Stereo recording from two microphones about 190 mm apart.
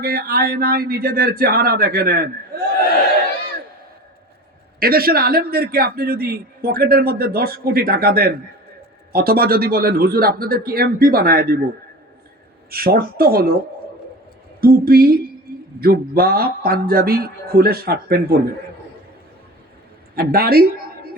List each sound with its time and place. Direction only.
0.0 s a man's voice: 55° right (ahead or behind)
4.8 s a man's voice: 50° right (ahead or behind)
12.7 s a man's voice: 50° right (ahead or behind)
14.6 s a man's voice: 50° right (ahead or behind)
20.1 s speech: 50° right (ahead or behind)